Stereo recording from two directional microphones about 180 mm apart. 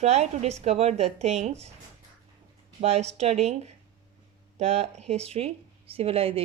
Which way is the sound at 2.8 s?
35° right (ahead or behind).